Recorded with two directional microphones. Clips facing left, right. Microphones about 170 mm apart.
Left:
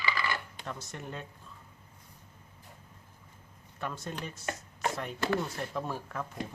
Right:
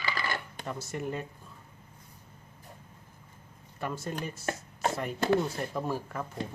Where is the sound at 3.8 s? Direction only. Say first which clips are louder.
Right 3 dB; 5° right (ahead or behind).